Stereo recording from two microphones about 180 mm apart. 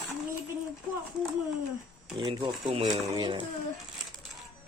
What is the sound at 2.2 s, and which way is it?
Speech, 25° right (ahead or behind).